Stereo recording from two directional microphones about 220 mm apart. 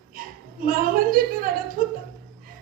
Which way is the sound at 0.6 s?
40° right (ahead or behind).